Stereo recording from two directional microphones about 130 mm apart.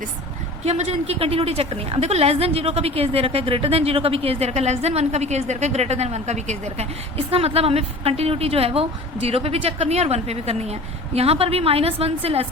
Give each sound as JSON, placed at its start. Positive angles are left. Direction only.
{"t": 0.6, "sound": "a woman's voice", "side_deg": -55}
{"t": 7.3, "sound": "a woman's voice", "side_deg": -50}